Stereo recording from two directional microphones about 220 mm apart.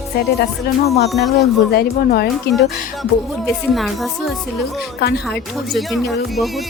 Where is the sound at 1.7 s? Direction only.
45° left (ahead or behind).